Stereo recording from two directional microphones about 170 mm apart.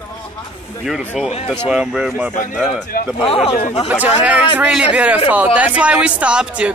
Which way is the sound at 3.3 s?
35° left (ahead or behind).